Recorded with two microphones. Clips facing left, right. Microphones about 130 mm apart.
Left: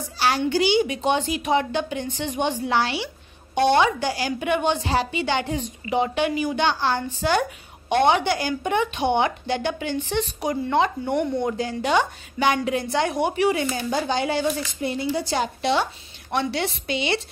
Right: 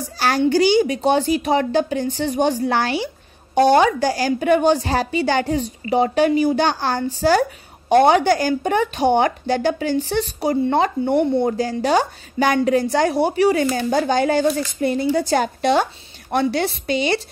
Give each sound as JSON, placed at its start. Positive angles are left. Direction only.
{"t": 0.2, "sound": "a woman's voice", "side_deg": -45}